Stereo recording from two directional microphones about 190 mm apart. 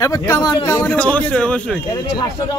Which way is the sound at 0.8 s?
5° left (ahead or behind).